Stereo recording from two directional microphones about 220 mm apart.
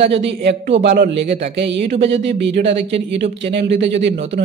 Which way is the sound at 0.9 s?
45° right (ahead or behind).